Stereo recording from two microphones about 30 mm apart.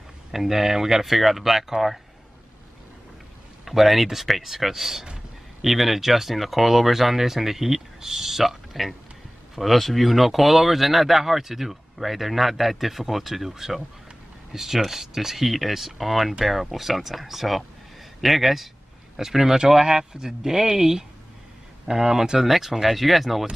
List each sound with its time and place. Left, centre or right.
0.3 s speech: centre
3.6 s speech: centre